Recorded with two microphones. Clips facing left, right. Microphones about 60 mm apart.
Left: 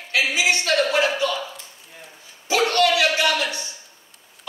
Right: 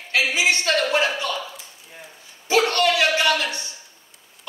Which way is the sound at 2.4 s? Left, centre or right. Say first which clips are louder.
Even; right.